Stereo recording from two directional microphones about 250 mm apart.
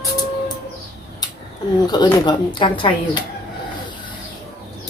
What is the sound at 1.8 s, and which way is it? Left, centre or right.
A woman's voice, centre.